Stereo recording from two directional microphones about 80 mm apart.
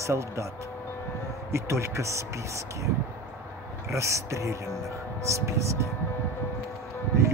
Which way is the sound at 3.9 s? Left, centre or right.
Right.